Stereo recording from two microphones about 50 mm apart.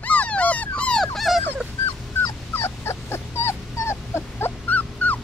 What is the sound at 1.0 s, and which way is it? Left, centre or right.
Dog, centre.